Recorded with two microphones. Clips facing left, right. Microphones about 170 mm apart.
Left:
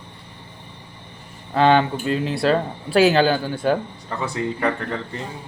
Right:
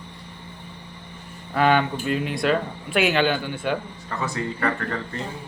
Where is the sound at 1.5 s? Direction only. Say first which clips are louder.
Left 3 dB; 30° left (ahead or behind).